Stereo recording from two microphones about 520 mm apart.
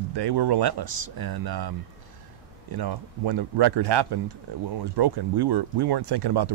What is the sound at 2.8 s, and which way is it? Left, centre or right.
Speech, right.